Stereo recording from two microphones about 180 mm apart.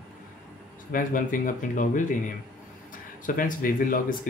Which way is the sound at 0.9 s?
50° left (ahead or behind).